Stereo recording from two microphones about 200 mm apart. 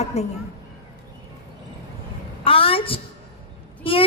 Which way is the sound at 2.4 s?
30° left (ahead or behind).